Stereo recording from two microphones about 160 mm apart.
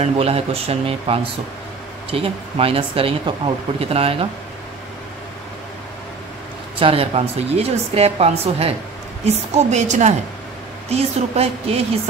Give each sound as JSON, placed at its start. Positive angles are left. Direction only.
{"t": 0.0, "sound": "a woman's voice", "side_deg": -40}
{"t": 6.8, "sound": "a woman's voice", "side_deg": -35}